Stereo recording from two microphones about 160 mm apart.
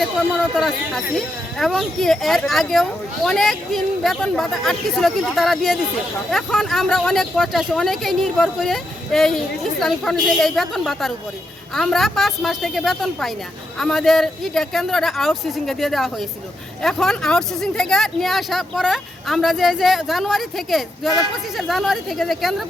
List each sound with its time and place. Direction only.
0.5 s speech: centre (ahead or behind)